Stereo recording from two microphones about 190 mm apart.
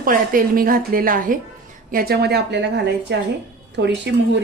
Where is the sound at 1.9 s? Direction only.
55° right (ahead or behind).